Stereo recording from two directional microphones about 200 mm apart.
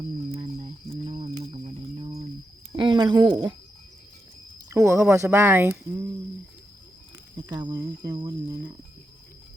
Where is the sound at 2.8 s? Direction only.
20° right (ahead or behind).